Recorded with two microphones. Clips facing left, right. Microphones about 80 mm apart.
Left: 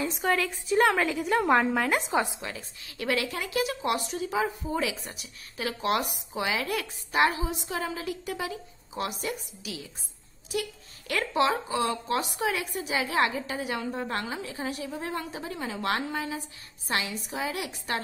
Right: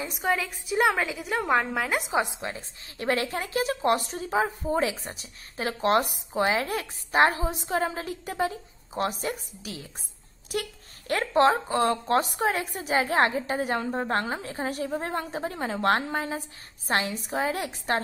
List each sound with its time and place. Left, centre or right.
0.0 s a woman's voice: centre
2.4 s speech: right